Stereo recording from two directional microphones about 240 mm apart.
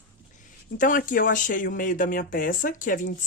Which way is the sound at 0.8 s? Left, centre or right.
Left.